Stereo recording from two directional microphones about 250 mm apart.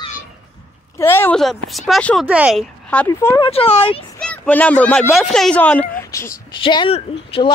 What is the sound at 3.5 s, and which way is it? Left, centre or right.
Speech, left.